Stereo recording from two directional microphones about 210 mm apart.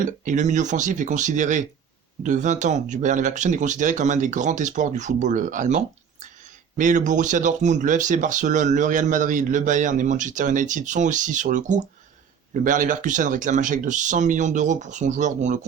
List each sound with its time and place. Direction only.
0.0 s speech: 35° right (ahead or behind)